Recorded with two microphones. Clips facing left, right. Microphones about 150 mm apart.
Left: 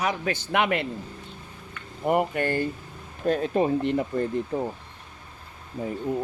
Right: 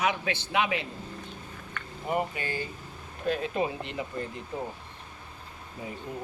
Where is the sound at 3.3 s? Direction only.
45° left (ahead or behind).